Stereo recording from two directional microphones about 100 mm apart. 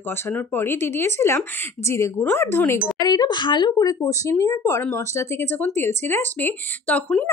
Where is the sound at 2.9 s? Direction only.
40° left (ahead or behind).